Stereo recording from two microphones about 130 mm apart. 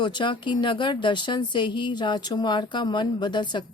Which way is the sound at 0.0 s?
40° left (ahead or behind).